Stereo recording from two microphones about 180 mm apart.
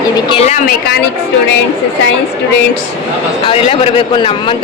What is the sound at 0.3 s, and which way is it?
Speech, 35° left (ahead or behind).